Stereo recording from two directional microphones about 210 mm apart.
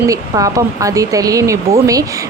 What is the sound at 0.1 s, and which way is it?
Speech, 15° right (ahead or behind).